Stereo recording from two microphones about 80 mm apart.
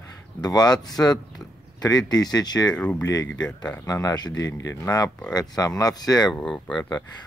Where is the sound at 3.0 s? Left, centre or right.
Left.